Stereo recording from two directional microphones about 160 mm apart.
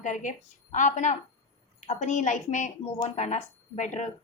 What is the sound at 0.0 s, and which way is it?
A woman's voice, 50° left (ahead or behind).